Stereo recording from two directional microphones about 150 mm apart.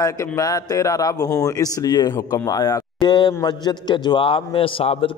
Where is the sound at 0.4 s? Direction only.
25° left (ahead or behind).